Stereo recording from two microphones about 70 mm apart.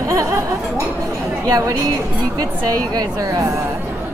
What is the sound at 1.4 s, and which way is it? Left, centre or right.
A woman's voice, right.